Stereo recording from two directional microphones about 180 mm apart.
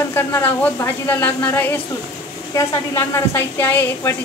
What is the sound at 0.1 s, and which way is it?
A woman's voice, 15° left (ahead or behind).